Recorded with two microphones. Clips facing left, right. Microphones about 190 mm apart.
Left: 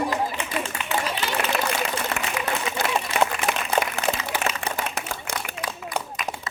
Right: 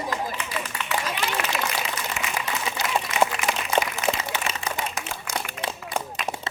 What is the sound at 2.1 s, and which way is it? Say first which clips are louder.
Applause: left 3 dB; 65° left (ahead or behind).